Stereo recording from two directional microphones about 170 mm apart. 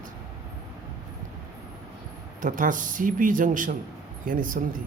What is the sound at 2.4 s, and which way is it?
Speech, 50° right (ahead or behind).